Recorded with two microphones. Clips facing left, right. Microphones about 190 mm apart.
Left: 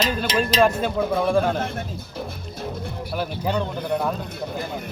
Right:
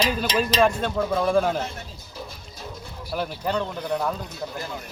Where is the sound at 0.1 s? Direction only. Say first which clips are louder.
Left 1 dB; 5° right (ahead or behind).